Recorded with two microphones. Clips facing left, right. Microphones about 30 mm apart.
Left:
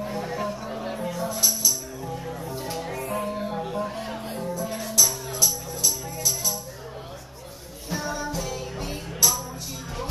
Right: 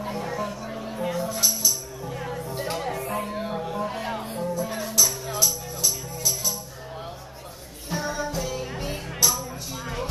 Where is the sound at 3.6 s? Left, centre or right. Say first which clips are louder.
Even; centre.